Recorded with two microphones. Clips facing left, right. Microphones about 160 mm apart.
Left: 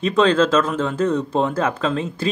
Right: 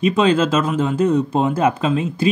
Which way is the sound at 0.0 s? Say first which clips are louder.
Right 1 dB; 10° right (ahead or behind).